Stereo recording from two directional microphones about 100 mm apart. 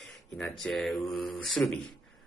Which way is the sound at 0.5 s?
Centre (ahead or behind).